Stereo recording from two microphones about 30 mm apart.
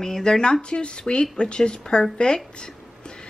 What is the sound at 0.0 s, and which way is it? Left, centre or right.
Speech, centre.